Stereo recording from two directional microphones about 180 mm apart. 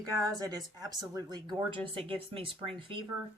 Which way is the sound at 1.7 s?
30° right (ahead or behind).